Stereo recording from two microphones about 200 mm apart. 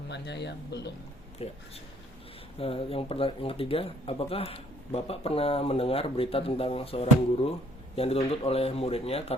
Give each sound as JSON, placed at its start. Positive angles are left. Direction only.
{"t": 0.1, "sound": "speech", "side_deg": 60}
{"t": 1.4, "sound": "speech", "side_deg": 30}
{"t": 2.6, "sound": "speech", "side_deg": 30}